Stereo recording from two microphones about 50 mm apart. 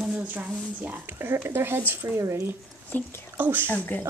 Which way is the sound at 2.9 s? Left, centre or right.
Left.